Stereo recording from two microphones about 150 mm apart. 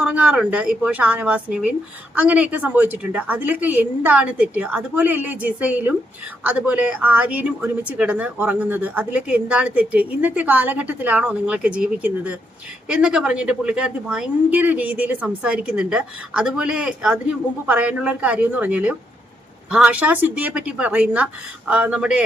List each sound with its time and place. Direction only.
0.0 s a woman's voice: 10° right (ahead or behind)